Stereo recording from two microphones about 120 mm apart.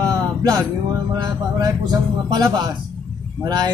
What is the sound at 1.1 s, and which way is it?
Speech, 35° right (ahead or behind).